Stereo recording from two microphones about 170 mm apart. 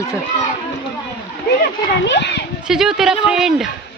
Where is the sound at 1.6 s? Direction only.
85° left.